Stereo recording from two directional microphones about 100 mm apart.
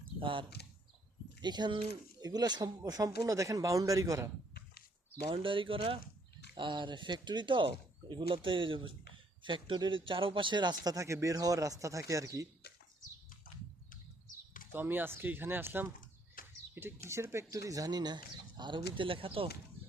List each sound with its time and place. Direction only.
0.2 s speech: 60° right (ahead or behind)
1.4 s speech: 45° right (ahead or behind)
5.3 s speech: 60° right (ahead or behind); by 12.5 s 35° right (ahead or behind)
14.7 s speech: 20° right (ahead or behind); by 18.8 s 45° right (ahead or behind)
18.9 s speech: 60° right (ahead or behind)